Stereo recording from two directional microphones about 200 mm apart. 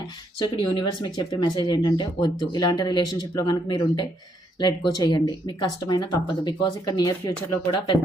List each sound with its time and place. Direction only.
0.4 s speech: 25° left (ahead or behind)